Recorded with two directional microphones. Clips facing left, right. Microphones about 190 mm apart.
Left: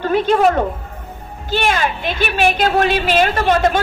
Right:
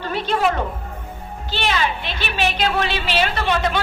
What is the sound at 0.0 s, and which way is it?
A woman's voice, 50° left (ahead or behind).